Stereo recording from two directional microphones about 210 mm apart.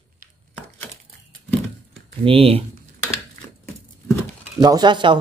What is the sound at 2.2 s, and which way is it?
Speech, 25° right (ahead or behind).